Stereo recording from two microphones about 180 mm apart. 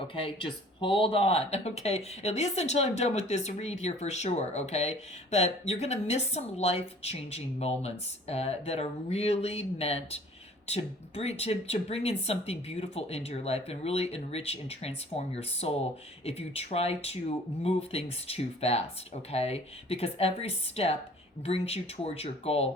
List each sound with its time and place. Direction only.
0.1 s speech: 30° left (ahead or behind)